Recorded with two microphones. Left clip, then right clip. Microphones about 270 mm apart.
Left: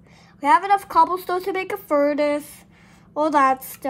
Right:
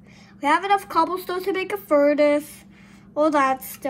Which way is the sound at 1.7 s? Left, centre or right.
Left.